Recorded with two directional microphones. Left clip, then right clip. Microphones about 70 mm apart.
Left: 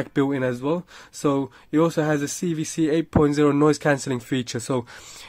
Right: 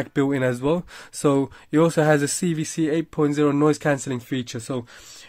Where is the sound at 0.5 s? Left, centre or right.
Right.